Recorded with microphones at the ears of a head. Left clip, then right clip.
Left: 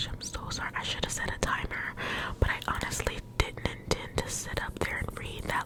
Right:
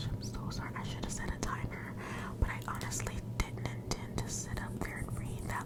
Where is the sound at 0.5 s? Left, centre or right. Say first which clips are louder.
Left 12 dB; left.